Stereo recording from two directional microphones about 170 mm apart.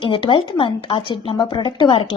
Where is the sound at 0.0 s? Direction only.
30° left (ahead or behind).